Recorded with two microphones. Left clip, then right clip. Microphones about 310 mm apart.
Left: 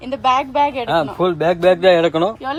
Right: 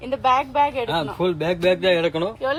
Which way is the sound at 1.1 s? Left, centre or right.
Left.